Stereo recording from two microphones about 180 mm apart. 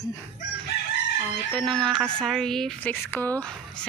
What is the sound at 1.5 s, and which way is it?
A woman's voice, 5° left (ahead or behind).